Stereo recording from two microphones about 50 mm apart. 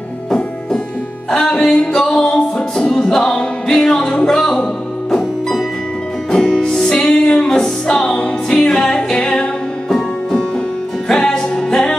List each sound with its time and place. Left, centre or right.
1.3 s music: centre
6.3 s music: centre
9.8 s music: centre